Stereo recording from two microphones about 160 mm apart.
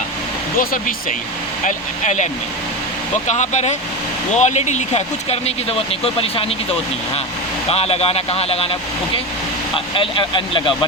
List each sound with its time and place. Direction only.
0.6 s speech: 65° left (ahead or behind)
1.6 s speech: 50° left (ahead or behind)
7.7 s speech: 40° left (ahead or behind)
9.7 s speech: 35° left (ahead or behind)